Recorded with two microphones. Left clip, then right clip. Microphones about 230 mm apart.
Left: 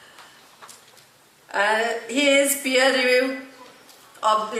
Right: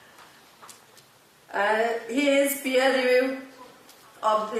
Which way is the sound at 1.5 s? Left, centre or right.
Centre.